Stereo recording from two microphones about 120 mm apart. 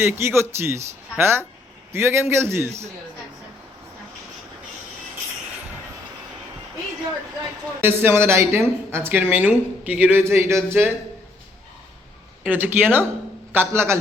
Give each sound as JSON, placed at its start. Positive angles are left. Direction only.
{"t": 0.0, "sound": "a woman's voice", "side_deg": -20}
{"t": 7.8, "sound": "a woman's voice", "side_deg": -15}
{"t": 12.4, "sound": "a woman's voice", "side_deg": -15}